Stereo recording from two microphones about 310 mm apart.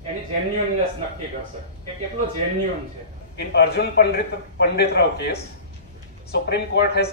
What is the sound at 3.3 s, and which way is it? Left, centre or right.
Speech, left.